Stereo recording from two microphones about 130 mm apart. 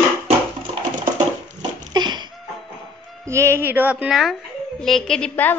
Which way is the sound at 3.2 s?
20° right (ahead or behind).